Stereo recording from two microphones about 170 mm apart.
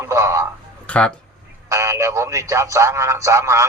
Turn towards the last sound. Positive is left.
turn(degrees=-15)  # may be behind; listen again after turning